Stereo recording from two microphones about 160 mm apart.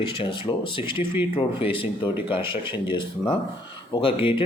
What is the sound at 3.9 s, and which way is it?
Speech, 35° left (ahead or behind).